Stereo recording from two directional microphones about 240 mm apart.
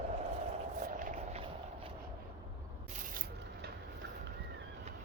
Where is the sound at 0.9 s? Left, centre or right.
Right.